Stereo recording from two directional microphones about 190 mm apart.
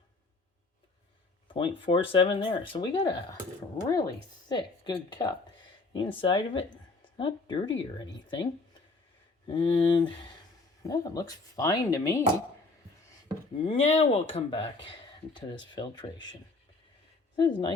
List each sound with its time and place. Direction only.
1.5 s speech: 25° left (ahead or behind)
9.5 s a woman's voice: 25° left (ahead or behind)
13.7 s speech: 30° left (ahead or behind)
17.3 s speech: 25° left (ahead or behind)